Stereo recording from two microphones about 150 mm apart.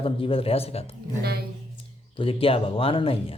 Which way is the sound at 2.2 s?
40° left (ahead or behind).